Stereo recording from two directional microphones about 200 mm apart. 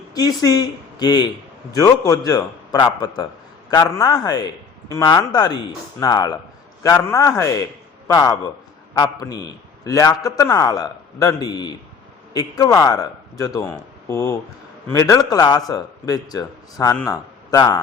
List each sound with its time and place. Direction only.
0.1 s a man's voice: 20° left (ahead or behind)